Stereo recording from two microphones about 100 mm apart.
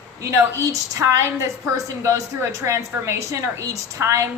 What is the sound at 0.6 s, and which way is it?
A woman's voice, 30° right (ahead or behind).